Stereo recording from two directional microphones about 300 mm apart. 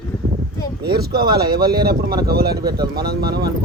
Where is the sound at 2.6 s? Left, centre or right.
Centre.